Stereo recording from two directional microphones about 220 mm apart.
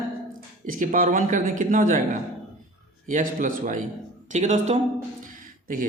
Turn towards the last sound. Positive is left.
turn(degrees=-35)  # may be behind; listen again after turning